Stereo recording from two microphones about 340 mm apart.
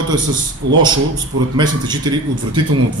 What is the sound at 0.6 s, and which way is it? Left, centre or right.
Speech, right.